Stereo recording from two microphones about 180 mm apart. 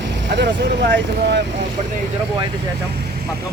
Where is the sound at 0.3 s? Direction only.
70° right (ahead or behind).